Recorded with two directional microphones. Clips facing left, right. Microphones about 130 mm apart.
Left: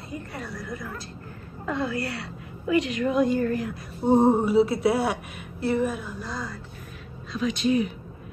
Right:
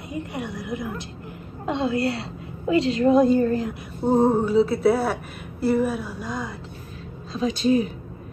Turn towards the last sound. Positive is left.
turn(degrees=-35)  # may be behind; listen again after turning